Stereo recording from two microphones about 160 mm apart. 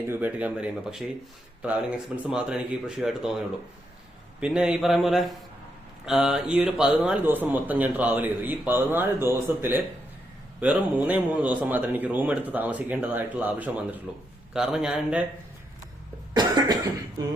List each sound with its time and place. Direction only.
0.1 s speech: 10° right (ahead or behind)
4.4 s a man's voice: 5° right (ahead or behind)
16.3 s cough: 25° right (ahead or behind)